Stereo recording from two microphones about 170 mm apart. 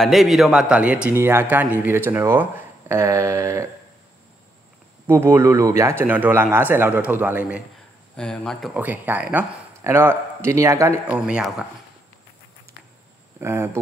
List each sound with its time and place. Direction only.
0.0 s speech: centre (ahead or behind); by 3.6 s 20° right (ahead or behind)
5.0 s speech: 15° right (ahead or behind)
8.2 s speech: 5° left (ahead or behind)
8.7 s speech: 10° right (ahead or behind)
11.1 s speech: 5° right (ahead or behind)
13.4 s speech: 15° right (ahead or behind)